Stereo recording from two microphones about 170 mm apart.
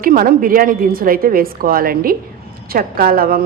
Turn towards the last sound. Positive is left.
turn(degrees=-60)  # may be behind; listen again after turning